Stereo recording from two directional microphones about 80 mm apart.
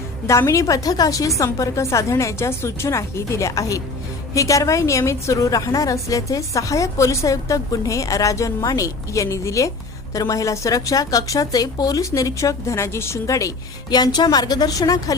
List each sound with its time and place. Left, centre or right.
0.3 s a woman's voice: left
13.9 s a woman's voice: left